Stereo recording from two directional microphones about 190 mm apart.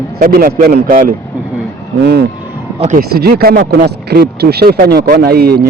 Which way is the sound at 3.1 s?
55° right (ahead or behind).